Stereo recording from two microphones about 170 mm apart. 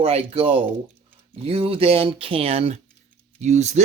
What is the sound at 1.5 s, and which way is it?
Speech, 35° right (ahead or behind).